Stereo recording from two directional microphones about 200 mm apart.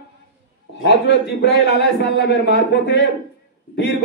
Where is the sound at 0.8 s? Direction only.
60° left (ahead or behind).